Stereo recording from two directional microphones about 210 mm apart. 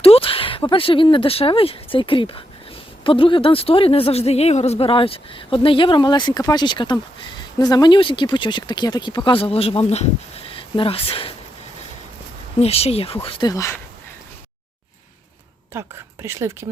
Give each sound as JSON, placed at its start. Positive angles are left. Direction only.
{"t": 0.0, "sound": "speech", "side_deg": 25}
{"t": 12.5, "sound": "speech", "side_deg": 30}
{"t": 15.7, "sound": "speech", "side_deg": -10}